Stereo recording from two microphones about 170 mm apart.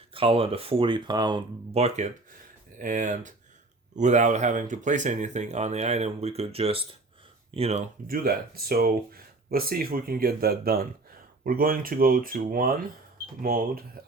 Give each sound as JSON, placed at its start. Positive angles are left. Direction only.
{"t": 0.1, "sound": "speech", "side_deg": -30}
{"t": 2.7, "sound": "speech", "side_deg": -50}
{"t": 8.0, "sound": "speech", "side_deg": -60}